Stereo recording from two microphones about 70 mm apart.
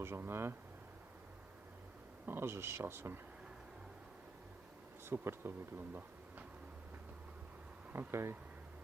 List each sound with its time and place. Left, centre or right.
0.0 s speech: right
2.2 s speech: right
5.0 s speech: right
7.9 s speech: right